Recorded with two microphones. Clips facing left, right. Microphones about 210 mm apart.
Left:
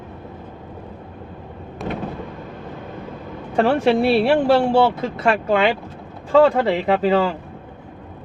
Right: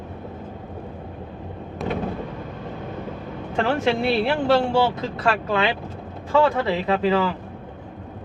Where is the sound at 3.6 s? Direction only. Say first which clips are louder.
Left 5 dB; 30° left (ahead or behind).